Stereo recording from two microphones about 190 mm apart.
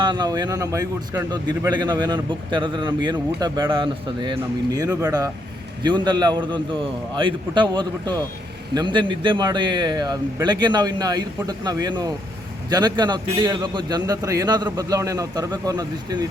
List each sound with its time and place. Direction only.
0.0 s a man's voice: 20° right (ahead or behind)